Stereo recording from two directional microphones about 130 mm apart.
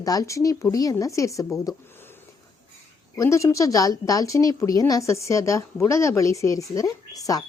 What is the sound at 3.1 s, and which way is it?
Speech, 25° left (ahead or behind).